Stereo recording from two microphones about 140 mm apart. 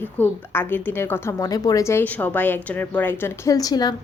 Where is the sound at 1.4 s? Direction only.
25° left (ahead or behind).